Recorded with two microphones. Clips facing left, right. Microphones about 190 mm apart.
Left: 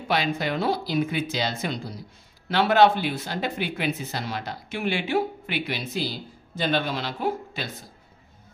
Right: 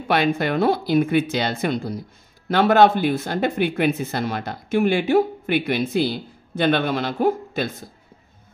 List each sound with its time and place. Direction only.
0.1 s speech: 55° right (ahead or behind)